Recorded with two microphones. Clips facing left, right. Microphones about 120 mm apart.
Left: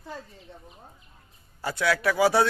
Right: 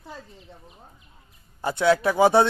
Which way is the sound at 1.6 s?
25° right (ahead or behind).